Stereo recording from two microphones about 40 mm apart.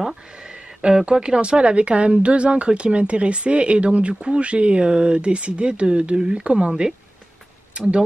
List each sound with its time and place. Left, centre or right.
0.8 s speech: right